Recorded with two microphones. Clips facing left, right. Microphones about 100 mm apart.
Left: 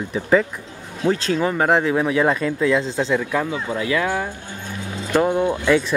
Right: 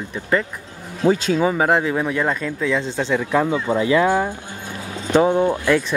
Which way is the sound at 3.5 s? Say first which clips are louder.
Right 5 dB; 30° right (ahead or behind).